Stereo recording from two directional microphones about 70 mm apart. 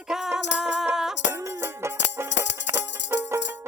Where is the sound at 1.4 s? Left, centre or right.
Right.